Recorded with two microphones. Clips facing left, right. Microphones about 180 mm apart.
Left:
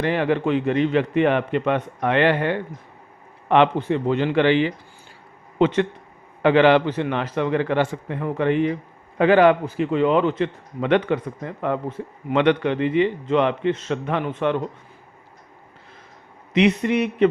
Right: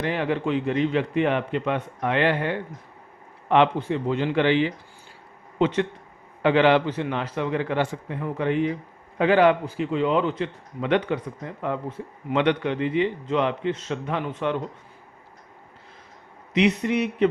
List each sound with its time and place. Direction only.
0.0 s a man's voice: 65° left (ahead or behind)
9.1 s a man's voice: 55° left (ahead or behind)
16.6 s a man's voice: 60° left (ahead or behind)